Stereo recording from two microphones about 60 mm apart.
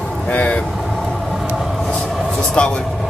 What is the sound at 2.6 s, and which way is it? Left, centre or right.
Speech, centre.